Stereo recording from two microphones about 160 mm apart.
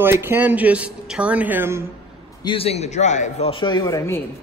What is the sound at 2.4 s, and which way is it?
Speech, 35° left (ahead or behind).